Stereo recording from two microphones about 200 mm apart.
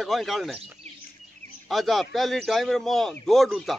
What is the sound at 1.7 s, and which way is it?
A man's voice, centre (ahead or behind).